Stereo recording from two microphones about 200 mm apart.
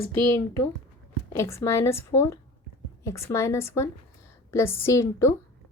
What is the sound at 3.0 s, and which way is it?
A woman's voice, 15° left (ahead or behind).